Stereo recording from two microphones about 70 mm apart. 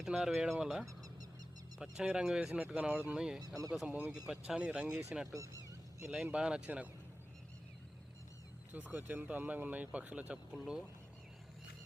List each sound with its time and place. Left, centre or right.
0.0 s speech: centre
0.9 s a sound: right
1.8 s speech: centre
2.6 s speech: centre
3.4 s speech: right
4.3 s speech: centre
5.3 s honk: right
6.3 s speech: centre
8.7 s speech: right
10.5 s speech: centre